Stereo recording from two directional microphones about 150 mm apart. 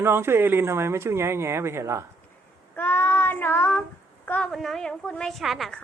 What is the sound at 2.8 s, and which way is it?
Child singing, 15° left (ahead or behind).